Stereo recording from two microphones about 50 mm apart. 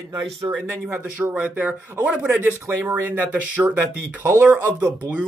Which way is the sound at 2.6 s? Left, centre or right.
Right.